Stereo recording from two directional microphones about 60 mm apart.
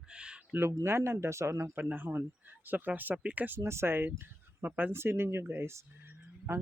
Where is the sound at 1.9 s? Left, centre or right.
Right.